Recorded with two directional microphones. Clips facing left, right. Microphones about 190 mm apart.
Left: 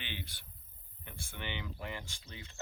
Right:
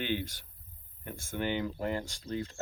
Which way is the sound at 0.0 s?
45° right (ahead or behind).